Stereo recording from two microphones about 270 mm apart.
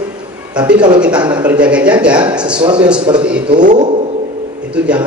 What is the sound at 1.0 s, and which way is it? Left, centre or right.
A man's voice, centre.